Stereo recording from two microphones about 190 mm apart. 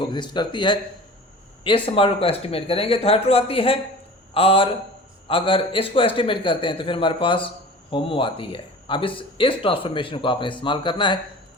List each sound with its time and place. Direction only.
0.0 s a man's voice: 25° left (ahead or behind)